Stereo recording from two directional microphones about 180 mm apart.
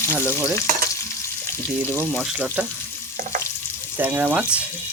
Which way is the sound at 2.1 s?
5° right (ahead or behind).